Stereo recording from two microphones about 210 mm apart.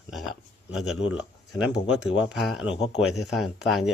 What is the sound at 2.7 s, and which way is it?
Speech, 30° left (ahead or behind).